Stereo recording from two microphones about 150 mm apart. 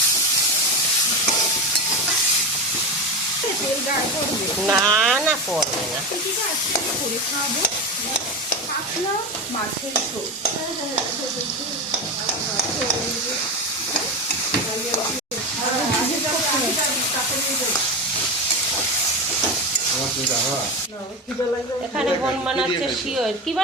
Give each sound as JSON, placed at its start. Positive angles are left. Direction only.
{"t": 4.6, "sound": "speech", "side_deg": -5}
{"t": 21.9, "sound": "speech", "side_deg": -5}